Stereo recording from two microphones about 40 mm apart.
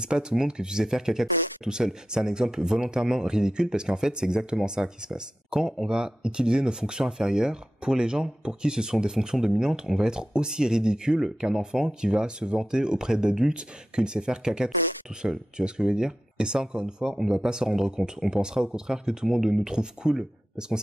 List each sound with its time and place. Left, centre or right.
0.0 s speech: centre
19.2 s speech: centre